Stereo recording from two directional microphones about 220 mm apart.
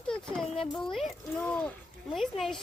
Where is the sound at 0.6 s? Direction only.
Centre (ahead or behind).